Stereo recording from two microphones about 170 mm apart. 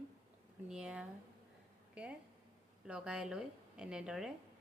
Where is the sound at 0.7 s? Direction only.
5° right (ahead or behind).